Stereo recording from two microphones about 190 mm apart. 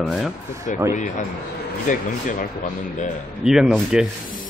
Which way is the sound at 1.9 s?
40° left (ahead or behind).